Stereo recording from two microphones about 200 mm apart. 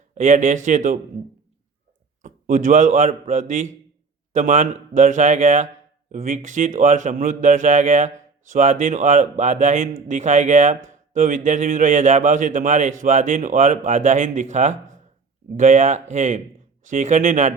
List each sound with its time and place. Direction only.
0.1 s speech: 40° right (ahead or behind)
2.2 s speech: 40° right (ahead or behind)